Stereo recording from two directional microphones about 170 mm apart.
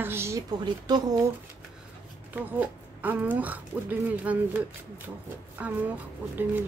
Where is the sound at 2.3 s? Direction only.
10° right (ahead or behind).